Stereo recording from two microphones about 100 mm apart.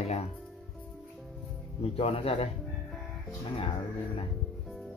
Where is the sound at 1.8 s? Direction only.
85° left.